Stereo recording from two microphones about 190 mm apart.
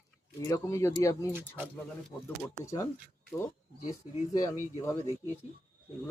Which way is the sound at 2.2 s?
15° left (ahead or behind).